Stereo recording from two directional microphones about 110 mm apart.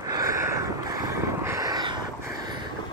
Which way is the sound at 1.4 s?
30° right (ahead or behind).